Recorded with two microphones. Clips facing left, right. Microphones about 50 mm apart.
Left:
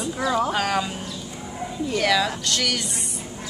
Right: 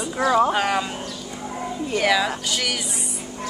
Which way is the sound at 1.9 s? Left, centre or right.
Centre.